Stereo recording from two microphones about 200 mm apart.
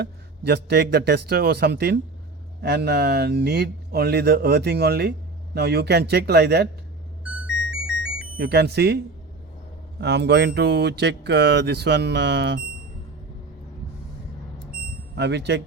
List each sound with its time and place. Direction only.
0.0 s speech: 55° right (ahead or behind)
7.3 s music: 5° right (ahead or behind)
8.4 s speech: 55° right (ahead or behind)
10.0 s speech: 60° right (ahead or behind)
15.1 s speech: 60° right (ahead or behind)